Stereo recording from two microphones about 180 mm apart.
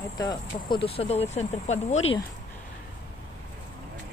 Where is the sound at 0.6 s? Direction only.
30° left (ahead or behind).